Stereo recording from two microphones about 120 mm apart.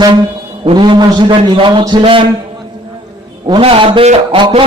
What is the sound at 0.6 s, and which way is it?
A man's voice, 40° right (ahead or behind).